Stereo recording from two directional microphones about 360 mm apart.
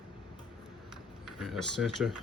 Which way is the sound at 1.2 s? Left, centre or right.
Centre.